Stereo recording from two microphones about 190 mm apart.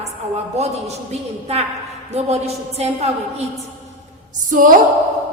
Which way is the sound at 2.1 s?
35° right (ahead or behind).